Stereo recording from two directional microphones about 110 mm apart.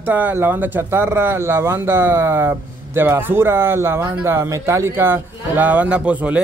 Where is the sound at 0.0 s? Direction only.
15° right (ahead or behind).